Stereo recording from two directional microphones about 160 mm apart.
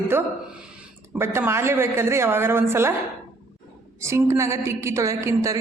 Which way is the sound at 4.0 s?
15° right (ahead or behind).